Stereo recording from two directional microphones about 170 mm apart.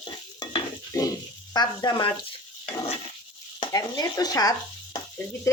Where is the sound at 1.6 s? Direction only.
25° left (ahead or behind).